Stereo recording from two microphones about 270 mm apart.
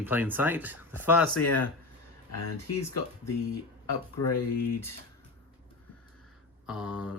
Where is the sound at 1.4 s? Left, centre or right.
Left.